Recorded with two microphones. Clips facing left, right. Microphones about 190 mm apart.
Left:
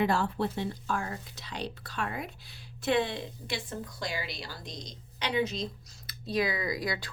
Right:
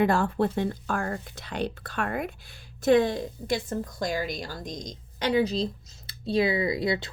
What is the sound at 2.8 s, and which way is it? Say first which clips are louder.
A woman's voice: right 7 dB; 45° right (ahead or behind).